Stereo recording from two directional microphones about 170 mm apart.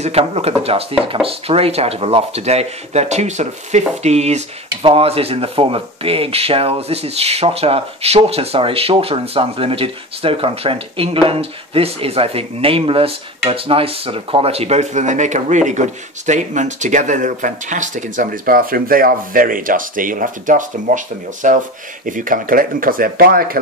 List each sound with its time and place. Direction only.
0.0 s speech: 35° right (ahead or behind); by 23.6 s 60° right (ahead or behind)